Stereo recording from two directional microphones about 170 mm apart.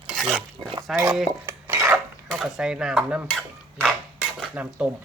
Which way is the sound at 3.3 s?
Centre (ahead or behind).